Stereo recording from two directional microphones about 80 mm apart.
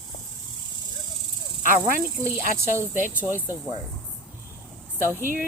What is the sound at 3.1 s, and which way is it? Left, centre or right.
Speech, right.